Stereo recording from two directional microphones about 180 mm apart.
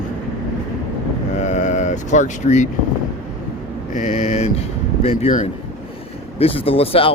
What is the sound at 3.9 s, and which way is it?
Speech, 40° left (ahead or behind).